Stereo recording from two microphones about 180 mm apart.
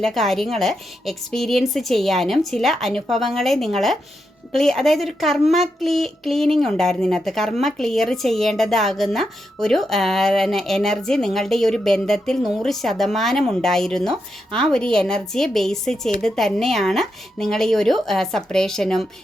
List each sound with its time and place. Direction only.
0.0 s speech: centre (ahead or behind)